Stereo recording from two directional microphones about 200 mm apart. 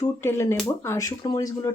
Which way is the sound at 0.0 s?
10° left (ahead or behind).